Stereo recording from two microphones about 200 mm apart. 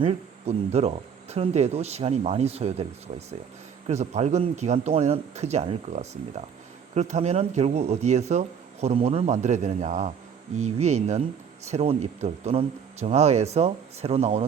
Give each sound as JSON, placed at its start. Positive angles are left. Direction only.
{"t": 0.0, "sound": "speech", "side_deg": -30}